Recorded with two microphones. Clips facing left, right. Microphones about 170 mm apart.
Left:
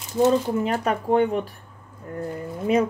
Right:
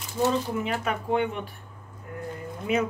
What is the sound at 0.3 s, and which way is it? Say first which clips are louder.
Speech: left 6 dB; 40° left (ahead or behind).